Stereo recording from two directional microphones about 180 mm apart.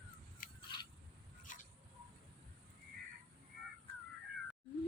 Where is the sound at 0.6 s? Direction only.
25° left (ahead or behind).